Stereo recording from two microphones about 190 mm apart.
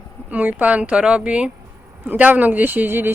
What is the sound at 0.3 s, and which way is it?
Speech, 10° right (ahead or behind).